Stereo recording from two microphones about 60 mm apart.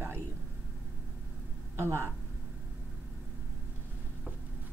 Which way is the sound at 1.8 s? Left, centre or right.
Right.